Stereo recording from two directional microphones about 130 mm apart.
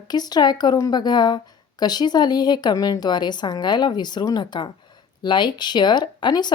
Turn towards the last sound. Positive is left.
turn(degrees=35)  # may be behind; listen again after turning